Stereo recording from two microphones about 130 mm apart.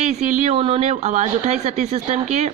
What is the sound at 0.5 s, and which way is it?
Speech, 45° right (ahead or behind).